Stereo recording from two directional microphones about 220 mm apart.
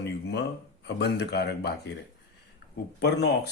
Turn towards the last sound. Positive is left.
turn(degrees=50)  # may be behind; listen again after turning